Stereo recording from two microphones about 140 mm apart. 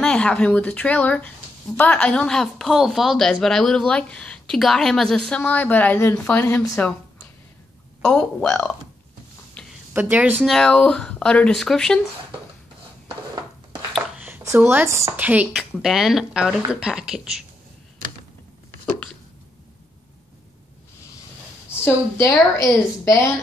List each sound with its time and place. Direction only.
0.0 s speech: 5° left (ahead or behind)
8.0 s speech: 5° left (ahead or behind)
9.6 s a sound: 5° left (ahead or behind)
9.9 s speech: 15° right (ahead or behind)
10.4 s speech: 5° left (ahead or behind)
13.9 s a sound: 10° right (ahead or behind)
14.4 s speech: 20° right (ahead or behind)
21.6 s a woman's voice: 15° left (ahead or behind)